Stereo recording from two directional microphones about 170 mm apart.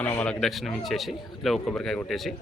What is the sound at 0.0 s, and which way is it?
Speech, 10° left (ahead or behind).